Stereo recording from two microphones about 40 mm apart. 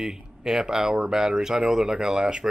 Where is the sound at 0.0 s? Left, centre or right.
Centre.